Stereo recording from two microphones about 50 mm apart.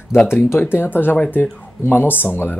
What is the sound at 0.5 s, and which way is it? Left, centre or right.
Speech, left.